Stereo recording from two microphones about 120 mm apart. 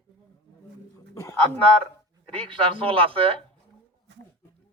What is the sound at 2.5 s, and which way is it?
Speech, 45° right (ahead or behind).